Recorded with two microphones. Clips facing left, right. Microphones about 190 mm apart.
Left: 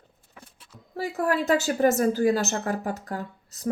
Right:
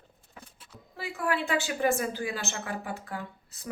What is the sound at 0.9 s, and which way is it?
Speech, 40° left (ahead or behind).